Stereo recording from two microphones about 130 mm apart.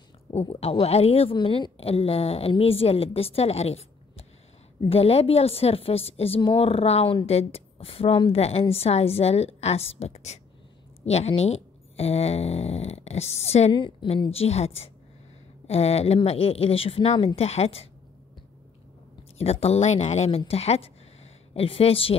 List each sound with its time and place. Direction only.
0.3 s a woman's voice: 50° left (ahead or behind)
4.8 s a woman's voice: 50° left (ahead or behind)
19.3 s speech: 50° left (ahead or behind)